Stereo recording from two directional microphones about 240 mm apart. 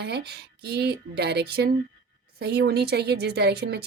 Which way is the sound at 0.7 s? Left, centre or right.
Right.